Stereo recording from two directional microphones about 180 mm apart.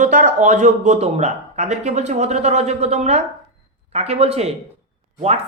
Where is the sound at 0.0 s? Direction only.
45° right (ahead or behind).